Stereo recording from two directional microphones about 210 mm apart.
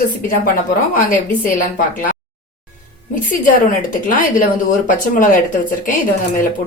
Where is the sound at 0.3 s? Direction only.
40° left (ahead or behind).